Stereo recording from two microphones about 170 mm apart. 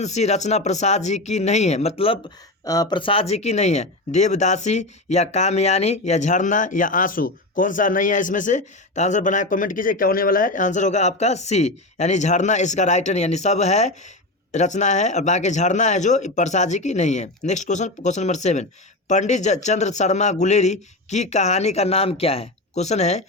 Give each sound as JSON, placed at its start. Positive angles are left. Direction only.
{"t": 0.0, "sound": "speech", "side_deg": 40}
{"t": 2.6, "sound": "speech", "side_deg": 20}